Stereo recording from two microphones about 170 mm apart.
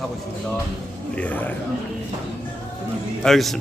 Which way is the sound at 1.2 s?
10° left (ahead or behind).